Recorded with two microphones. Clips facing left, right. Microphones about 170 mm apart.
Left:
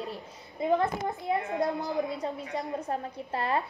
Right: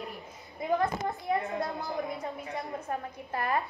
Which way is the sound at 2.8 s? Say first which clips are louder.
Left 3 dB; 30° left (ahead or behind).